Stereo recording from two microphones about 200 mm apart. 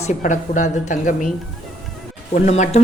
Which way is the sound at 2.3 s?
35° left (ahead or behind).